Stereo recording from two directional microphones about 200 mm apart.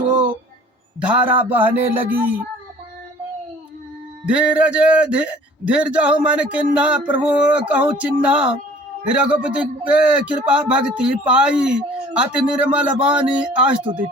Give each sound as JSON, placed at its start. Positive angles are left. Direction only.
{"t": 1.0, "sound": "a man's voice", "side_deg": -10}
{"t": 4.3, "sound": "a man's voice", "side_deg": -5}